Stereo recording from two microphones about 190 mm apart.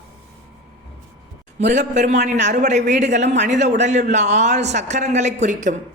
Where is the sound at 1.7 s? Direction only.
40° right (ahead or behind).